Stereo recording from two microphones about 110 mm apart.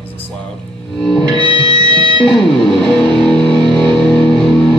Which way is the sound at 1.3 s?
50° left (ahead or behind).